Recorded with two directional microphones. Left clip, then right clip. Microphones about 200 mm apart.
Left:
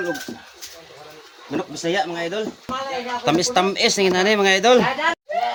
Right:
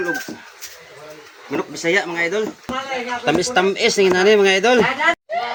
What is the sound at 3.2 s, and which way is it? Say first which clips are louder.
Speech: right 1 dB; 60° left (ahead or behind).